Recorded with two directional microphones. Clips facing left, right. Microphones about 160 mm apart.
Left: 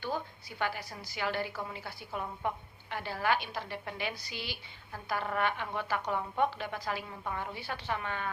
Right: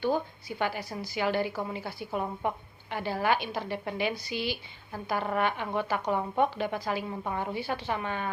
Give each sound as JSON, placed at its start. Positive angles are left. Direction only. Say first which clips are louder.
{"t": 0.6, "sound": "a woman's voice", "louder": "right 4 dB", "side_deg": -20}